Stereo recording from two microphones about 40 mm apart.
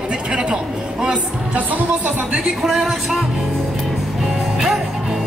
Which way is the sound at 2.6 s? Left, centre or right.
Centre.